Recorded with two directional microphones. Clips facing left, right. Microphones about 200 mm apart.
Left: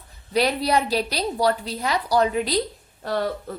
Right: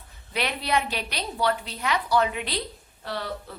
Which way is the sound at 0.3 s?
35° left (ahead or behind).